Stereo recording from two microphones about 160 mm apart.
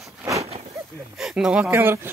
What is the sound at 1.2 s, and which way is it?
Speech, 5° right (ahead or behind).